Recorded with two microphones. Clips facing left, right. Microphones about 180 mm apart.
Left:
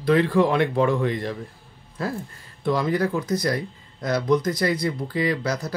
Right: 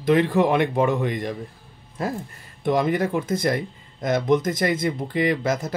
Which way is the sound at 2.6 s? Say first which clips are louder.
Right 1 dB; 20° right (ahead or behind).